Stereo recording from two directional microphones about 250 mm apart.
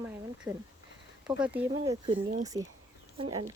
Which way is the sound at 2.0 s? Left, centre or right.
Right.